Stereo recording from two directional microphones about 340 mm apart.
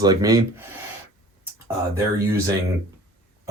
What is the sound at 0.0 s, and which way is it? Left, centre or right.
Speech, centre.